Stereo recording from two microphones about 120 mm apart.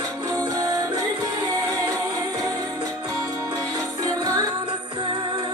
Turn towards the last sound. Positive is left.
turn(degrees=-30)  # may be behind; listen again after turning